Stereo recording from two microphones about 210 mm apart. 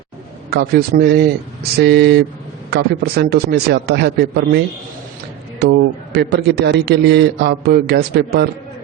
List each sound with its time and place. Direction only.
0.5 s a man's voice: 50° right (ahead or behind)